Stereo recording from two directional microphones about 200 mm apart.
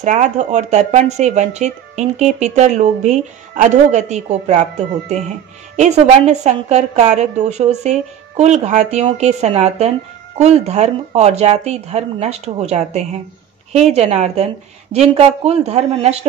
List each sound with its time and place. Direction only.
0.0 s speech: 35° right (ahead or behind)